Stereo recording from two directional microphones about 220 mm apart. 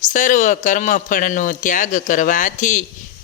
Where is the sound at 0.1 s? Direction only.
35° left (ahead or behind).